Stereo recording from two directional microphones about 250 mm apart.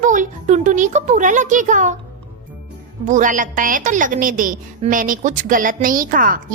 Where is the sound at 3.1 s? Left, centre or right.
Right.